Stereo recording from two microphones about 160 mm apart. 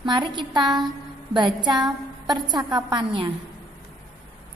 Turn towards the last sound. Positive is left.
turn(degrees=-25)  # may be behind; listen again after turning